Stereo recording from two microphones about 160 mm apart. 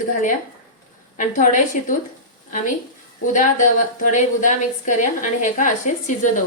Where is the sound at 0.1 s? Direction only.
55° left (ahead or behind).